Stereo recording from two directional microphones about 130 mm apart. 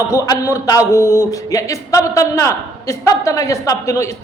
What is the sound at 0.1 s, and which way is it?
A man's voice, 25° left (ahead or behind).